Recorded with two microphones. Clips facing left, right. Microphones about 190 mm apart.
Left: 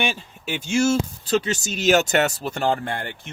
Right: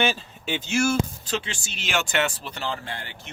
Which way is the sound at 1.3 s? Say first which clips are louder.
Left 8 dB; 40° left (ahead or behind).